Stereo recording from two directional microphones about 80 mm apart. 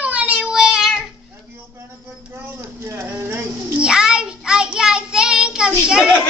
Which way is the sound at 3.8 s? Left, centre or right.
Centre.